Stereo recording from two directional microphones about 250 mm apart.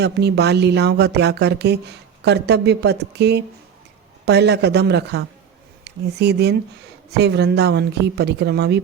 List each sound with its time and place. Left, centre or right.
0.0 s speech: right